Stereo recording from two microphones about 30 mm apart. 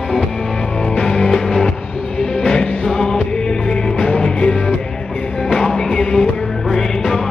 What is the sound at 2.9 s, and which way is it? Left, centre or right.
Music, left.